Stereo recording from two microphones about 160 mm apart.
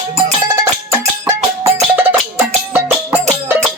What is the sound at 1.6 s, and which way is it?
Music, 15° right (ahead or behind).